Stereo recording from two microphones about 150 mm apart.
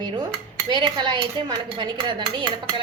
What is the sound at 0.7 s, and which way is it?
Speech, 30° right (ahead or behind).